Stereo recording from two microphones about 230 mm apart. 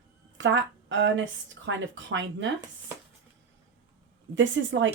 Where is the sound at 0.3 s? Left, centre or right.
Right.